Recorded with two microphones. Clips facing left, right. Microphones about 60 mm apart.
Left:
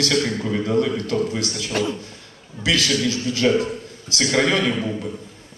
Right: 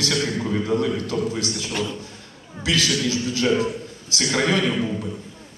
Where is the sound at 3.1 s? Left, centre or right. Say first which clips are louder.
Left 3 dB; left.